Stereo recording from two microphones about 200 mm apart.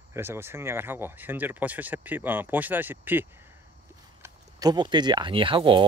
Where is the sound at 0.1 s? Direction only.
10° right (ahead or behind).